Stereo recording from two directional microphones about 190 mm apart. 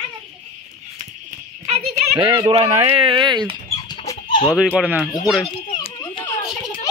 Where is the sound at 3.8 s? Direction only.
20° left (ahead or behind).